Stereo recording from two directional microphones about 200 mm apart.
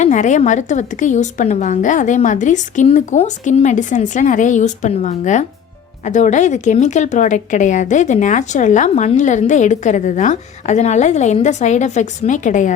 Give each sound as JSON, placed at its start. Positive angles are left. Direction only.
{"t": 0.0, "sound": "a woman's voice", "side_deg": 35}